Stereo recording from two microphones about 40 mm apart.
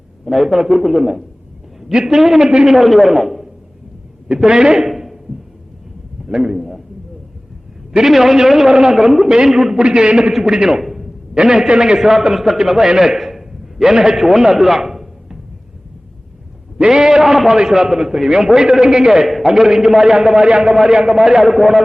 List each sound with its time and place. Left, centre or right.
0.3 s a man's voice: centre
2.0 s a man's voice: centre
2.5 s a man's voice: centre
2.7 s a man's voice: centre
4.4 s a man's voice: centre
4.9 s a sound: centre
6.2 s a man's voice: centre
7.9 s a man's voice: centre
9.7 s a man's voice: right
10.8 s a sound: centre
11.8 s a man's voice: centre
16.8 s a man's voice: centre
19.2 s a man's voice: centre